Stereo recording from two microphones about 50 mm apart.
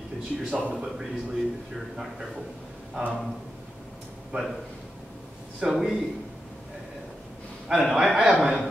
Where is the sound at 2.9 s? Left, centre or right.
Right.